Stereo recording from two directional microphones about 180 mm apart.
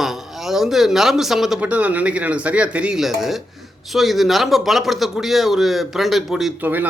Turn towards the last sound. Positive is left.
turn(degrees=-10)  # may be behind; listen again after turning